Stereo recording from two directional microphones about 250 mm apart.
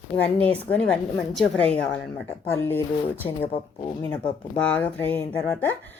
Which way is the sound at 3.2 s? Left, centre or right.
Left.